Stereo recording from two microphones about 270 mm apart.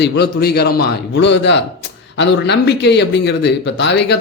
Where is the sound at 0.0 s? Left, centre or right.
Left.